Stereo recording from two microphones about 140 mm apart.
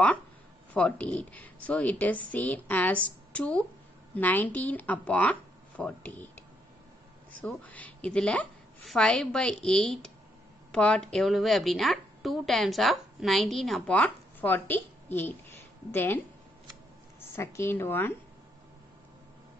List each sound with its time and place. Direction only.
0.7 s speech: 5° left (ahead or behind)
7.4 s a woman's voice: 10° left (ahead or behind)
17.4 s speech: 20° left (ahead or behind)